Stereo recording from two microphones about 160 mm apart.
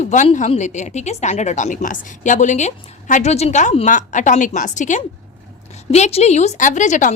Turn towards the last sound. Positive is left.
turn(degrees=50)  # may be behind; listen again after turning